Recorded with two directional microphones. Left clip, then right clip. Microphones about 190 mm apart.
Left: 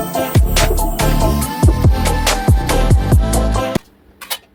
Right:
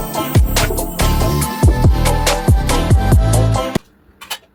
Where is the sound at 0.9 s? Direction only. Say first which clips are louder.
Right 1 dB; centre (ahead or behind).